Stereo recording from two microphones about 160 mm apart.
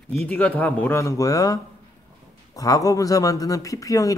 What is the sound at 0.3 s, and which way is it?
A man's voice, 10° left (ahead or behind).